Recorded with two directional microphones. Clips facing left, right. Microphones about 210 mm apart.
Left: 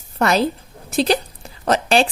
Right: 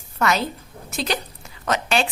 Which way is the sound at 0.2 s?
35° left (ahead or behind).